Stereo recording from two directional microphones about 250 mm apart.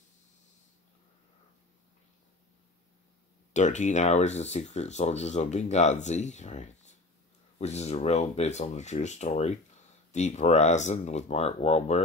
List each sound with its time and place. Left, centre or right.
3.5 s speech: left